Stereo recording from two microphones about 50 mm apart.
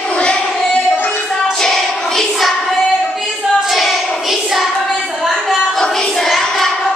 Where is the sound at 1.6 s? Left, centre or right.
Centre.